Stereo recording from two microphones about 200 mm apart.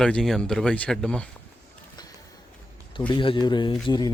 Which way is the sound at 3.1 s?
25° left (ahead or behind).